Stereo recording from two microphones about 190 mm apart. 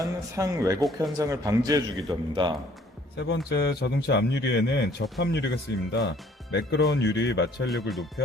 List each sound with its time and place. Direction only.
0.0 s a man's voice: 15° right (ahead or behind)
3.2 s a man's voice: 60° left (ahead or behind)
7.7 s speech: centre (ahead or behind)